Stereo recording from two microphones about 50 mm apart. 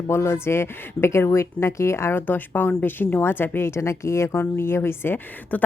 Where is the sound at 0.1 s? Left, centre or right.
Left.